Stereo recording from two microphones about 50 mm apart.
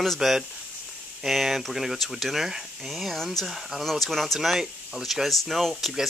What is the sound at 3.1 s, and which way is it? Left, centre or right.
Speech, centre.